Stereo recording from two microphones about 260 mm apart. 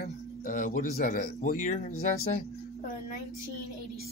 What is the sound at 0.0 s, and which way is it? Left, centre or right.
Speech, left.